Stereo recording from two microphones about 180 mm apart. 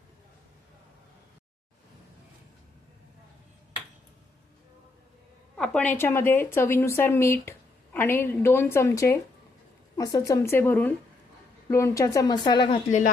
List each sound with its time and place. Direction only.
5.5 s a woman's voice: 5° left (ahead or behind); by 12.8 s 25° left (ahead or behind)